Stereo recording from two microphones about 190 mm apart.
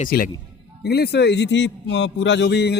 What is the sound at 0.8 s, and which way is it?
Speech, 60° left (ahead or behind).